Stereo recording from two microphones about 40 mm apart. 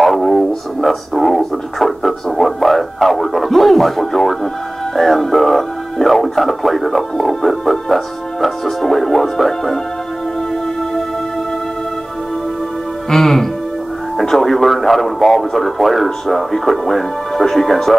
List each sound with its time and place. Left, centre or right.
0.0 s speech: centre
13.1 s speech: centre